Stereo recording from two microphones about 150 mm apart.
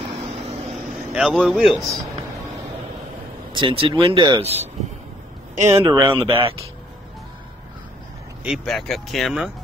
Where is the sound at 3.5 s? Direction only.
35° right (ahead or behind).